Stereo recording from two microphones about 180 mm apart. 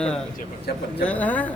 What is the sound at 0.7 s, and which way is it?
Speech, 60° left (ahead or behind).